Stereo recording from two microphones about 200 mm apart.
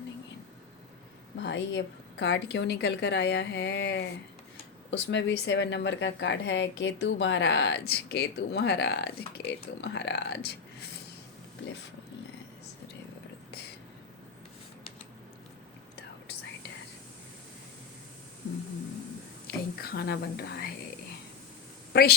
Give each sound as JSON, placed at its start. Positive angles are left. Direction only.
{"t": 1.4, "sound": "speech", "side_deg": 65}
{"t": 19.5, "sound": "whispering", "side_deg": 50}
{"t": 21.9, "sound": "a woman's voice", "side_deg": 50}